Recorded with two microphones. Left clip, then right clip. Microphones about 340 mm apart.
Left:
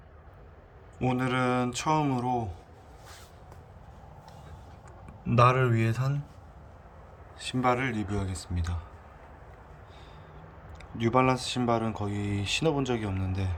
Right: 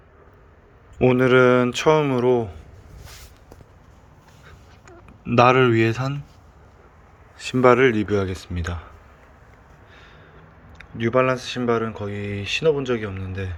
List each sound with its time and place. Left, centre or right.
0.9 s speech: centre
5.3 s speech: centre
7.3 s speech: centre
10.8 s speech: centre